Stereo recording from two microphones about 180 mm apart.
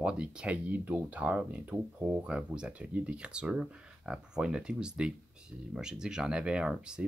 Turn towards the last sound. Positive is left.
turn(degrees=-5)  # may be behind; listen again after turning